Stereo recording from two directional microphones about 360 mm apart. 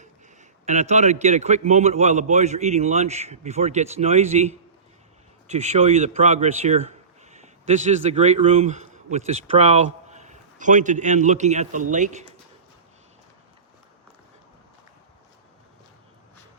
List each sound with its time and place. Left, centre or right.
0.6 s a man's voice: centre